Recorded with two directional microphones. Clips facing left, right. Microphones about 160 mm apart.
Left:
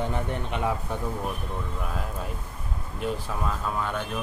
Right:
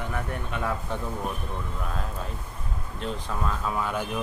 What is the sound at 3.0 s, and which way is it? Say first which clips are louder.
Speech: left 1 dB; centre (ahead or behind).